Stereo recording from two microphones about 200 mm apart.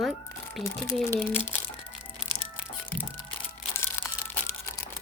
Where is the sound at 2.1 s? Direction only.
90° left.